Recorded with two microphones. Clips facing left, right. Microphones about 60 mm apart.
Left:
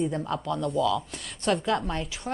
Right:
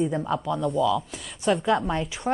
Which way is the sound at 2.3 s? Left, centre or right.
Right.